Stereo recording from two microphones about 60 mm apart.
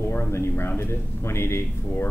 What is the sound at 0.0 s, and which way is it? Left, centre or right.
Speech, left.